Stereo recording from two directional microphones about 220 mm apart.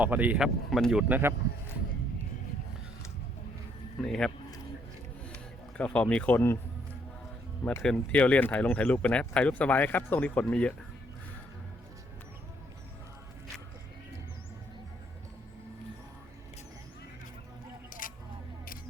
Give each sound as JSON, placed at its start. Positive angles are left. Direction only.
{"t": 0.0, "sound": "speech", "side_deg": -5}
{"t": 4.0, "sound": "speech", "side_deg": 0}
{"t": 5.3, "sound": "a man's voice", "side_deg": 5}
{"t": 7.6, "sound": "speech", "side_deg": 5}
{"t": 18.0, "sound": "a sound", "side_deg": 40}